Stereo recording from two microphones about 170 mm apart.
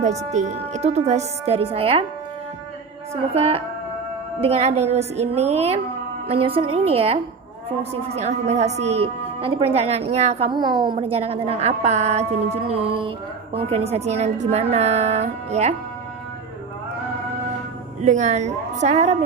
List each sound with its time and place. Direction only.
0.3 s a woman's voice: 45° right (ahead or behind)
3.3 s a woman's voice: 35° right (ahead or behind)
18.0 s a woman's voice: 45° right (ahead or behind)